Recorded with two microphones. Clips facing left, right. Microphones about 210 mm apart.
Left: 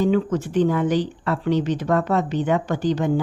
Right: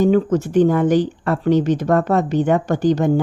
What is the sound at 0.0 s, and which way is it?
Speech, 45° right (ahead or behind).